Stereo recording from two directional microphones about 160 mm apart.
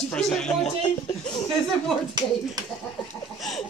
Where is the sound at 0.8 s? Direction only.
30° left (ahead or behind).